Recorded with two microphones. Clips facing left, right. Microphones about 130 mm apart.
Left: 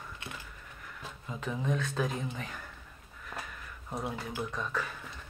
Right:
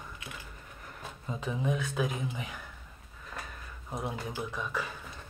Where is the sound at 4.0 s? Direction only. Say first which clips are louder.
Even; 15° right (ahead or behind).